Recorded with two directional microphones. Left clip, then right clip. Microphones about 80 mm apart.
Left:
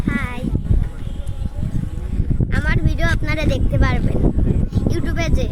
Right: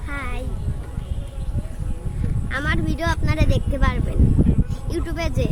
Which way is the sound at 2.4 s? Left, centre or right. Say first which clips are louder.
Right 1 dB; right.